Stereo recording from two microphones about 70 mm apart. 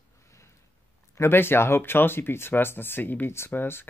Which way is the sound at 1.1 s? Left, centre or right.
Left.